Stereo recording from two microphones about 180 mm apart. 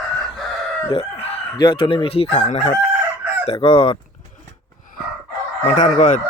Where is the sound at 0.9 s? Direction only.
30° left (ahead or behind).